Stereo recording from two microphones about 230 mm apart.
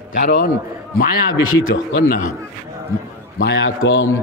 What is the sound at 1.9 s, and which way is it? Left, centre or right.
Speech, left.